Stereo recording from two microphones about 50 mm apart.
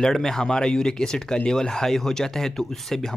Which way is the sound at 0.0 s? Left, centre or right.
Centre.